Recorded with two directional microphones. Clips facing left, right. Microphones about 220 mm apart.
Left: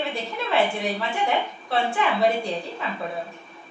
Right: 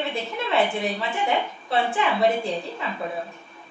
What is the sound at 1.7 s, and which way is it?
Speech, centre (ahead or behind).